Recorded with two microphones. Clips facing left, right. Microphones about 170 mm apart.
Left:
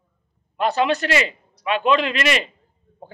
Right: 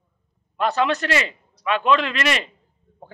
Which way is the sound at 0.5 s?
15° left (ahead or behind).